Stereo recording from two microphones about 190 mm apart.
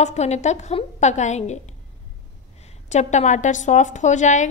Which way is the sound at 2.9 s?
40° left (ahead or behind).